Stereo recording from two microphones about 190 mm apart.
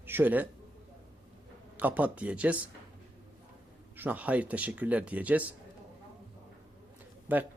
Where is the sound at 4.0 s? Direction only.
10° right (ahead or behind).